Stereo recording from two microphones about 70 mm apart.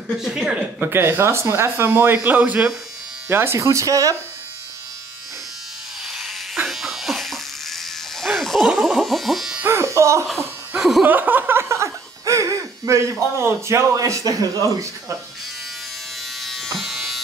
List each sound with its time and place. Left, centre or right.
0.2 s speech: centre
0.7 s a man's voice: right
3.3 s a man's voice: right
6.1 s electric shaver: centre
8.7 s a sound: centre
9.7 s electric shaver: right
10.8 s chuckle: centre
11.1 s speech: right
11.7 s laughter: right
13.1 s a man's voice: right
16.3 s electric shaver: centre